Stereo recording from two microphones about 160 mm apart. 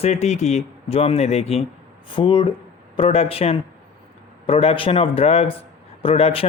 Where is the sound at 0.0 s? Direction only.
45° left (ahead or behind).